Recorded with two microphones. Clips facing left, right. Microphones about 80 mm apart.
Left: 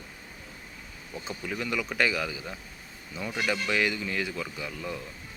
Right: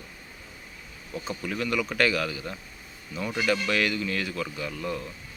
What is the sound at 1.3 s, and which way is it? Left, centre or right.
Speech, centre.